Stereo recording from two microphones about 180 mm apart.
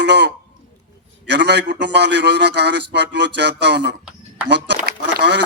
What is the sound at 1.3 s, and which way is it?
A man's voice, 70° right (ahead or behind).